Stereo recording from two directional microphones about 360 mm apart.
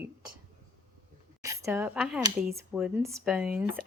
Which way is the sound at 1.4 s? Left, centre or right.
Centre.